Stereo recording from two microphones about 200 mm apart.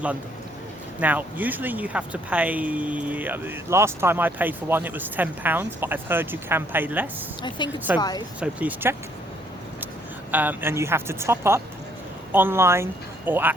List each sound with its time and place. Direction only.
0.9 s speech: 10° right (ahead or behind)
7.6 s speech: 20° left (ahead or behind)
8.4 s speech: 5° right (ahead or behind)
10.3 s speech: 10° right (ahead or behind)